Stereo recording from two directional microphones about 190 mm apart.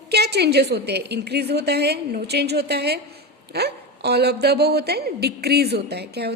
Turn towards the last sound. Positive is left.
turn(degrees=-60)  # may be behind; listen again after turning